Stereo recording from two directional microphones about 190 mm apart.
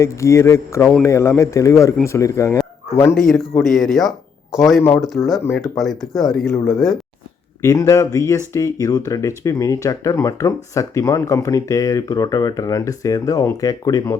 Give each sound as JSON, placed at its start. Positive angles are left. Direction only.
{"t": 0.0, "sound": "speech", "side_deg": 15}
{"t": 3.2, "sound": "speech", "side_deg": 0}
{"t": 5.4, "sound": "speech", "side_deg": 10}
{"t": 5.6, "sound": "speech", "side_deg": 0}
{"t": 7.6, "sound": "speech", "side_deg": 15}